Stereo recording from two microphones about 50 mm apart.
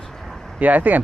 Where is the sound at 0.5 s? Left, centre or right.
Right.